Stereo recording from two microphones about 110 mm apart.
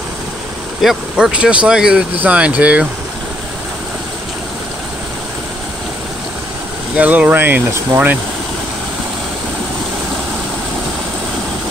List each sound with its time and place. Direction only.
0.8 s speech: 5° right (ahead or behind)
7.0 s speech: 15° right (ahead or behind)